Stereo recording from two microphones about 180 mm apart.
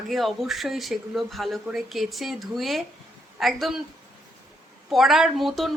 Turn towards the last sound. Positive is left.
turn(degrees=0)  # may be behind; listen again after turning